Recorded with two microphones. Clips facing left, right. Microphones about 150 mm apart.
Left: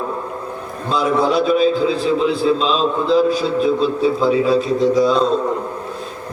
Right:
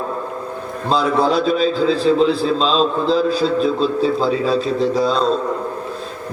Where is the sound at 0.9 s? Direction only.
30° right (ahead or behind).